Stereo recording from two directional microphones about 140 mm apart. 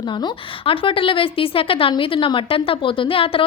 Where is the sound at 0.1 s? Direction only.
35° left (ahead or behind).